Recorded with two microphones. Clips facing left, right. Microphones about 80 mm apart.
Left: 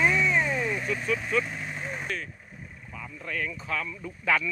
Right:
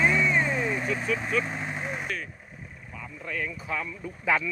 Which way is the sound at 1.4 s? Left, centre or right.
Right.